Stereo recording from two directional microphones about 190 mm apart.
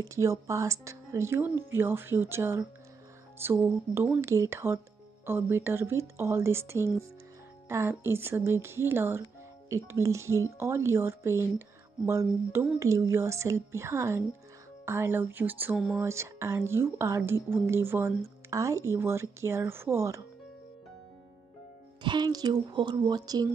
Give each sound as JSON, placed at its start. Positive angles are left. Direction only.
{"t": 0.0, "sound": "speech", "side_deg": -15}
{"t": 16.0, "sound": "speech", "side_deg": -15}
{"t": 22.0, "sound": "speech", "side_deg": -20}